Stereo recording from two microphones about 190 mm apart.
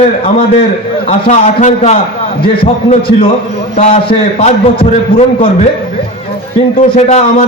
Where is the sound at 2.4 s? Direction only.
30° left (ahead or behind).